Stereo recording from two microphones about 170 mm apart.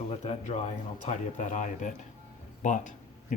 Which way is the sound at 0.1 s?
35° left (ahead or behind).